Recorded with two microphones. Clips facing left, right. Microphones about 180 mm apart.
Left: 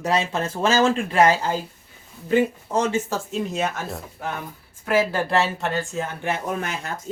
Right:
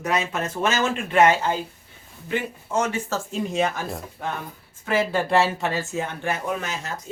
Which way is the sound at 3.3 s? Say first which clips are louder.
Right 3 dB; centre (ahead or behind).